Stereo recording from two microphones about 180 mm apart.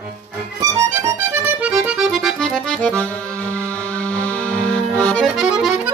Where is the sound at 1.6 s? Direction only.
5° right (ahead or behind).